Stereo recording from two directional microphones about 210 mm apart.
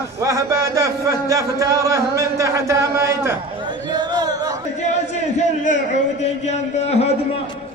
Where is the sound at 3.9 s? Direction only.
20° right (ahead or behind).